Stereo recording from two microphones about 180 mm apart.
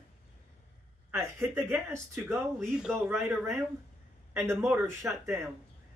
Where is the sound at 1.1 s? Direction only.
15° right (ahead or behind).